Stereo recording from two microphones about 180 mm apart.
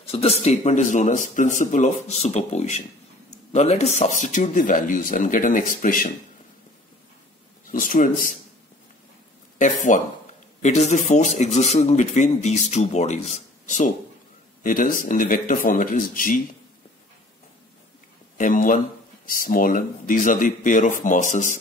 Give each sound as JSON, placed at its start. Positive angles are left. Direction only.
{"t": 0.1, "sound": "a man's voice", "side_deg": 35}
{"t": 7.7, "sound": "speech", "side_deg": 50}
{"t": 9.6, "sound": "a man's voice", "side_deg": 45}
{"t": 18.4, "sound": "speech", "side_deg": 50}